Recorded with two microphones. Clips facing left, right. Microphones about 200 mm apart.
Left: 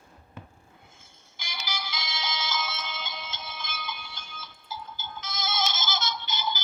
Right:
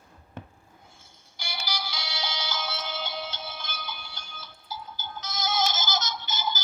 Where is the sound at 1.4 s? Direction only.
35° right (ahead or behind).